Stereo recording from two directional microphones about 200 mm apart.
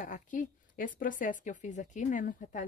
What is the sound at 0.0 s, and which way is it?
Speech, 40° left (ahead or behind).